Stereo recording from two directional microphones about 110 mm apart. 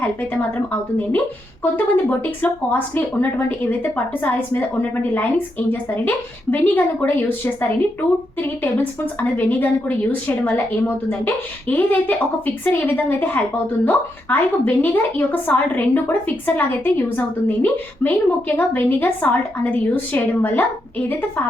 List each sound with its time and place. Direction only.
0.5 s a woman's voice: 15° left (ahead or behind)